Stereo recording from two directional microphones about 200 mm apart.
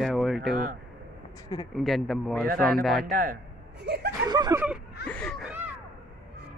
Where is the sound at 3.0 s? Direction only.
50° right (ahead or behind).